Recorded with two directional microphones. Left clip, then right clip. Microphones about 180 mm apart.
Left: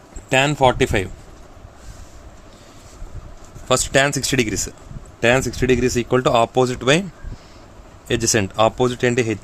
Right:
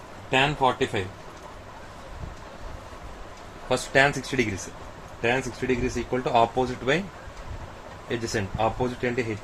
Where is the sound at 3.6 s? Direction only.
90° left.